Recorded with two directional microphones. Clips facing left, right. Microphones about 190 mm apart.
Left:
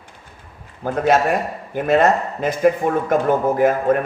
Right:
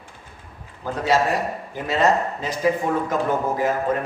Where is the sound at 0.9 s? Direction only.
55° left (ahead or behind).